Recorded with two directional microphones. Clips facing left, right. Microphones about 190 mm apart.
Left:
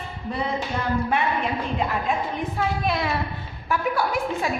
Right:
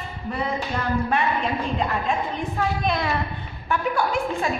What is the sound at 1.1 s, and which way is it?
A woman's voice, 10° left (ahead or behind).